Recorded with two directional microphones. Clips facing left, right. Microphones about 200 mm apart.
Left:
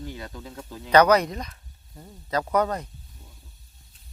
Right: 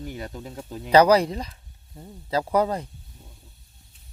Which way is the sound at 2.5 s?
30° right (ahead or behind).